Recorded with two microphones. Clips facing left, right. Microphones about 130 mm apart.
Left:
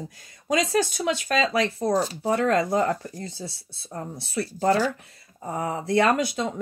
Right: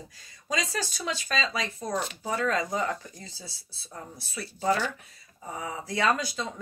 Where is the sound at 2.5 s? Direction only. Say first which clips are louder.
Left 6 dB; 55° left (ahead or behind).